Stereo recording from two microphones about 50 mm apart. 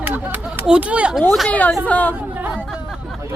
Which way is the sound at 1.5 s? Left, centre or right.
Left.